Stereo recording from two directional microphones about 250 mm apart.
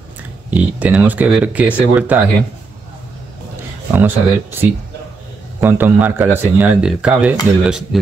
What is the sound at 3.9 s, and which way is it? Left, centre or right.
Speech, centre.